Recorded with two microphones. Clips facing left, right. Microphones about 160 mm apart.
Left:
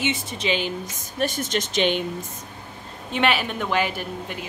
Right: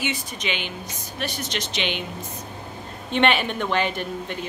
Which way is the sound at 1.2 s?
45° left (ahead or behind).